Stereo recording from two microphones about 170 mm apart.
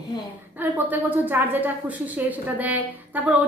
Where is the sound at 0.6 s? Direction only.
10° right (ahead or behind).